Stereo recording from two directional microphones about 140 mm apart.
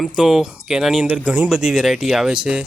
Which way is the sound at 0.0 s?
5° right (ahead or behind).